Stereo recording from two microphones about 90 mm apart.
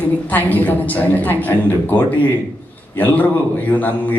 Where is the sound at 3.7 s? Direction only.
15° left (ahead or behind).